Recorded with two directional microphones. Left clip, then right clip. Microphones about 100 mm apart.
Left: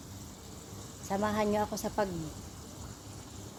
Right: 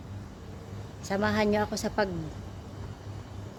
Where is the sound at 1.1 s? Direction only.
10° right (ahead or behind).